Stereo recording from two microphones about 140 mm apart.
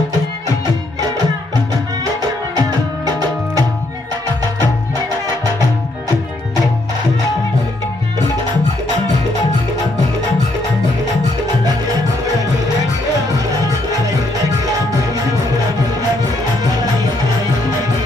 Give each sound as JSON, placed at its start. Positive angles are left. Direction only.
{"t": 2.6, "sound": "music", "side_deg": -25}